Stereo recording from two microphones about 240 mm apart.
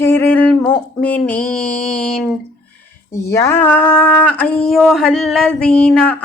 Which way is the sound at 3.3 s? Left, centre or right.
Centre.